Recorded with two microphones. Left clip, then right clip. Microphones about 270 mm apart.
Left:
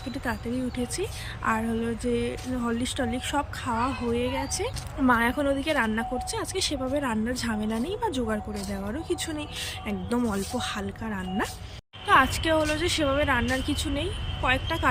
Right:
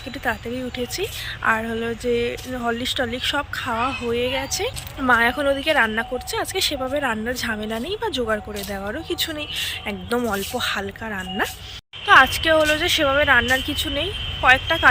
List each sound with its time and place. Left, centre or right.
0.3 s a woman's voice: centre